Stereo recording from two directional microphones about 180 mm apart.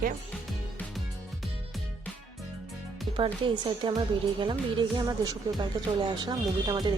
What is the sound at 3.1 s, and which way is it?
Speech, 25° right (ahead or behind).